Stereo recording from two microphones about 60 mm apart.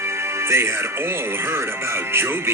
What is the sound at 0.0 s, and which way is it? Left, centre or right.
Speech, right.